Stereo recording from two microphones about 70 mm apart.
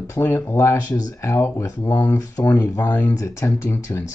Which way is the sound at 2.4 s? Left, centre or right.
Left.